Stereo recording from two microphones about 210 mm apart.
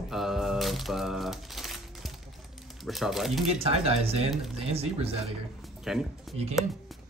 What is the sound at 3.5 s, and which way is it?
Speech, 30° right (ahead or behind).